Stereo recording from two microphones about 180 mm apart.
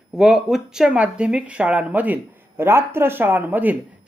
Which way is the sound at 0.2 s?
Centre (ahead or behind).